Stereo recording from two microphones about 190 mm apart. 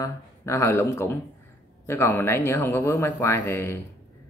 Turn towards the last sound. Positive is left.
turn(degrees=15)  # may be behind; listen again after turning